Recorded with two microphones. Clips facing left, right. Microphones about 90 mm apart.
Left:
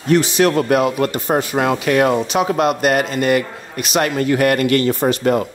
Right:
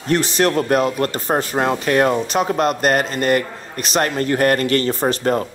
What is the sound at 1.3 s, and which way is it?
A man's voice, 40° right (ahead or behind).